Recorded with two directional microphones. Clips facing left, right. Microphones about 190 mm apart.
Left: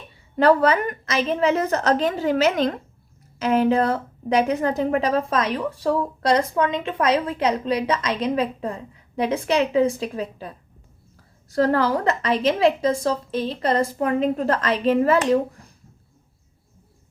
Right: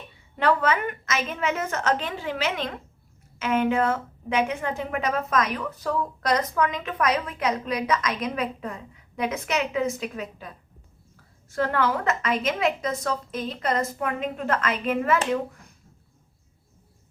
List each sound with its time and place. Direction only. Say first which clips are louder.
0.3 s a woman's voice: left 6 dB; 40° left (ahead or behind)